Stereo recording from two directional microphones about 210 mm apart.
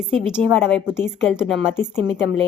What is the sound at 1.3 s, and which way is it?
Speech, centre (ahead or behind).